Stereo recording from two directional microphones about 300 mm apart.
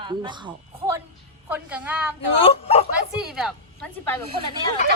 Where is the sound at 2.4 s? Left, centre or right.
Centre.